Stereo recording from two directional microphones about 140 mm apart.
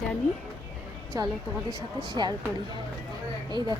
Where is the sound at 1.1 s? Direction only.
25° right (ahead or behind).